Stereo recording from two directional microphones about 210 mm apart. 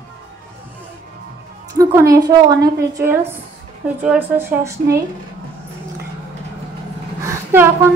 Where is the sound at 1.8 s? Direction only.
15° right (ahead or behind).